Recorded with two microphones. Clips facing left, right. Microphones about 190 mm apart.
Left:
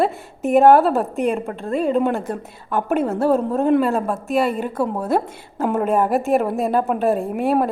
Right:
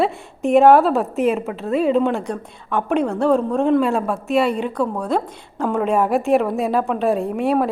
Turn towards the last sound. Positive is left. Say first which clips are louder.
# even
turn(degrees=0)  # may be behind; listen again after turning